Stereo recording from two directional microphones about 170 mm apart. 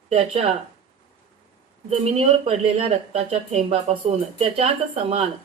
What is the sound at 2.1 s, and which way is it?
Speech, 35° right (ahead or behind).